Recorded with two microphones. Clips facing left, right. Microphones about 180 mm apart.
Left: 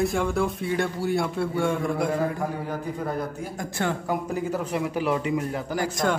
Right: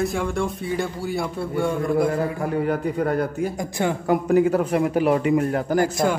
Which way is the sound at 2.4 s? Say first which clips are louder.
Right 7 dB; 65° right (ahead or behind).